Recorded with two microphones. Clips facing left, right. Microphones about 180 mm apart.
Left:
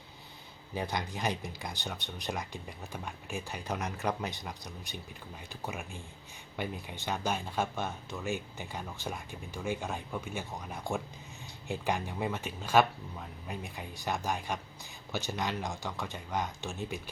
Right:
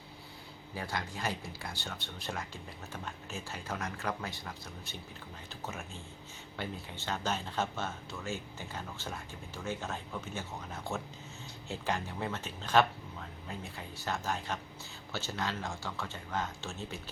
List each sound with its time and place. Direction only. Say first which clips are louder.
0.7 s speech: left 4 dB; 20° left (ahead or behind)